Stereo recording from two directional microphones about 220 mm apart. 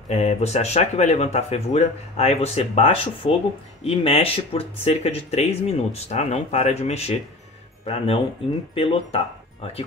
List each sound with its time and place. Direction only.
0.1 s speech: 30° left (ahead or behind)